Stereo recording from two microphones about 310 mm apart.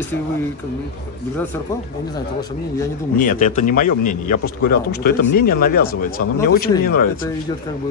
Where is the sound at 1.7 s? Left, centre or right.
Centre.